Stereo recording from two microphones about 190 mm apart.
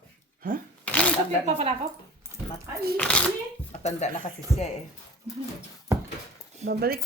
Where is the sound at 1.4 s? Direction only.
30° right (ahead or behind).